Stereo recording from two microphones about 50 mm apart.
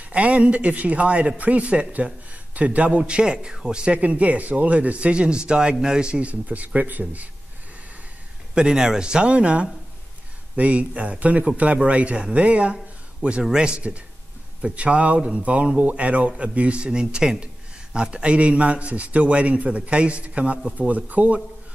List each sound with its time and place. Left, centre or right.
0.0 s a man's voice: right
3.0 s speech: centre; by 7.2 s right
8.5 s speech: centre; by 21.4 s right